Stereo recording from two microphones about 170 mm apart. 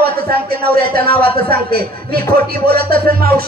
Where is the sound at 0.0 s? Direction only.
60° right (ahead or behind).